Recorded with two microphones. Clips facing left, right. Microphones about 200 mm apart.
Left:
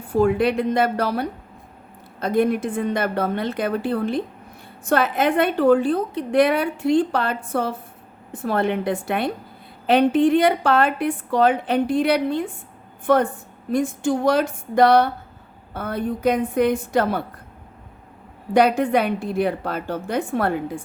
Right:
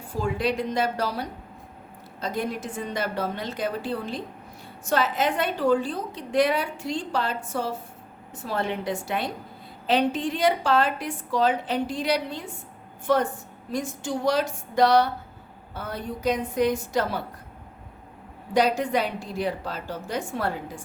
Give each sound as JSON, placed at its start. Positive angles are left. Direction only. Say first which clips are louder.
{"t": 0.1, "sound": "a woman's voice", "louder": "left 8 dB", "side_deg": 55}
{"t": 18.5, "sound": "a woman's voice", "louder": "left 5 dB", "side_deg": 55}